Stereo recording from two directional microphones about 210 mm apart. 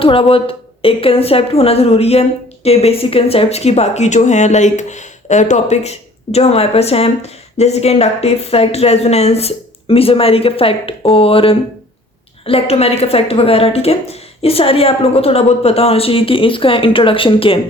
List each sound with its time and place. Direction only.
0.0 s speech: 25° left (ahead or behind)